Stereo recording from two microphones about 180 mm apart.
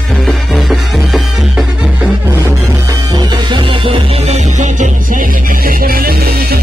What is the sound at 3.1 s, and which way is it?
Music, 25° right (ahead or behind).